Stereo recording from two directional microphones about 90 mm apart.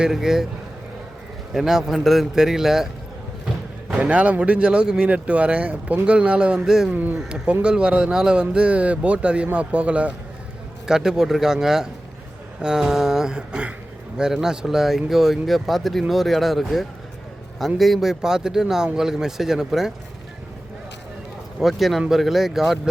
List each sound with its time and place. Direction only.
0.0 s speech: 5° right (ahead or behind)
1.5 s speech: 5° right (ahead or behind)
6.9 s speech: 20° right (ahead or behind)
7.2 s speech: 5° right (ahead or behind)
21.6 s speech: centre (ahead or behind)